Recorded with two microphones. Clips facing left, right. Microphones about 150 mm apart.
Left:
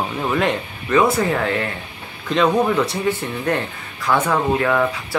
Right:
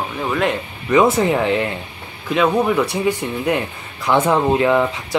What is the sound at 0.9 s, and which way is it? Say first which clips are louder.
Speech: right 2 dB; 20° right (ahead or behind).